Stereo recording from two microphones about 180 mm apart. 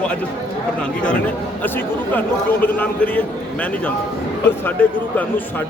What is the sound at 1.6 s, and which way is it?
A man's voice, 10° left (ahead or behind).